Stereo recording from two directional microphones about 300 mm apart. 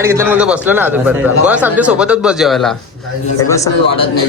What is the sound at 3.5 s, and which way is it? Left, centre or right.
Speech, centre.